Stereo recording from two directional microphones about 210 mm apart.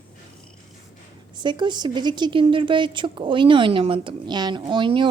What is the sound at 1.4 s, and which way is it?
Speech, 20° right (ahead or behind).